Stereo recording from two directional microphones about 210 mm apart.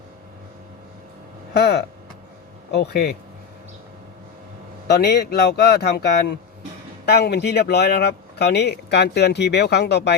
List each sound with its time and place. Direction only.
1.5 s speech: 50° left (ahead or behind)
4.9 s speech: 50° left (ahead or behind)